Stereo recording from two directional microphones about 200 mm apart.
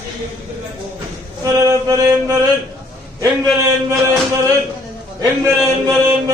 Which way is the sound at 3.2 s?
15° right (ahead or behind).